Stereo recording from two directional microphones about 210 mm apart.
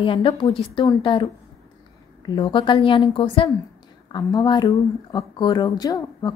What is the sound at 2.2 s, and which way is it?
A woman's voice, 20° left (ahead or behind).